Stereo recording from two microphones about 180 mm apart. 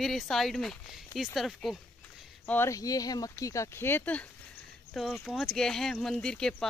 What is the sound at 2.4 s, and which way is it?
Speech, 10° left (ahead or behind).